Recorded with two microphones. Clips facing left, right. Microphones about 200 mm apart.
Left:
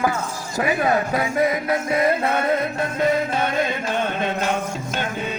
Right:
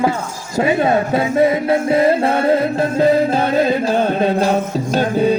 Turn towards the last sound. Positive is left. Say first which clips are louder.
# right 11 dB
turn(degrees=-35)  # may be behind; listen again after turning